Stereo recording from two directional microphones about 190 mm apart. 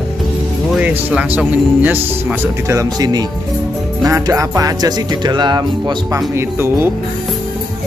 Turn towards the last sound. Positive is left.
turn(degrees=-10)  # may be behind; listen again after turning